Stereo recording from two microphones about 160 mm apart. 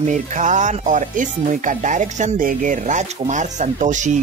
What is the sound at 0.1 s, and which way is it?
Speech, 50° right (ahead or behind).